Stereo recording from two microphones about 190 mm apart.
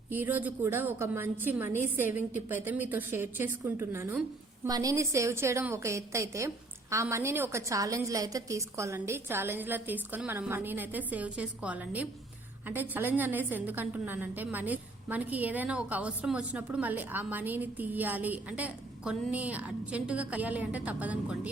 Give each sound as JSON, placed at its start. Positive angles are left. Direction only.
{"t": 0.1, "sound": "a woman's voice", "side_deg": -10}